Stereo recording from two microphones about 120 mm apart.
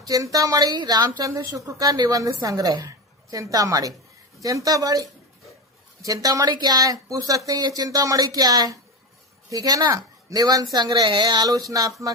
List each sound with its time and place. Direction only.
0.0 s a woman's voice: 30° right (ahead or behind)